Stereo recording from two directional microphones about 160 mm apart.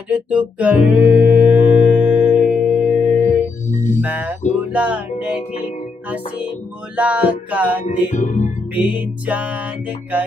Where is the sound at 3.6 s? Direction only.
50° left (ahead or behind).